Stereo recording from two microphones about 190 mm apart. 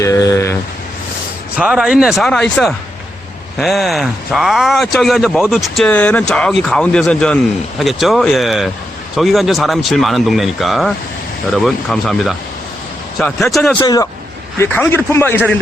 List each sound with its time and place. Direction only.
0.0 s a sound: 15° left (ahead or behind)
1.5 s a man's voice: 5° right (ahead or behind)
13.7 s speech: 15° left (ahead or behind)